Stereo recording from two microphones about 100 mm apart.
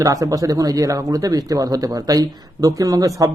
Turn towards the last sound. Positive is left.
turn(degrees=-35)  # may be behind; listen again after turning